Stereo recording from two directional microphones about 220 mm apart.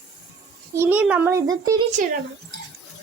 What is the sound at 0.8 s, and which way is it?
A child's voice, 5° right (ahead or behind).